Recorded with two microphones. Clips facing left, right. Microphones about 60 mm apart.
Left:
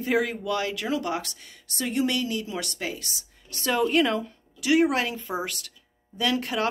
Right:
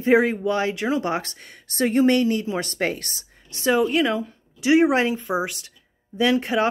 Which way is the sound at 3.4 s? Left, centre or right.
Right.